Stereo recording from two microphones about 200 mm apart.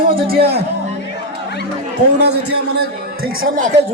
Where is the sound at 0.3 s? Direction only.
50° right (ahead or behind).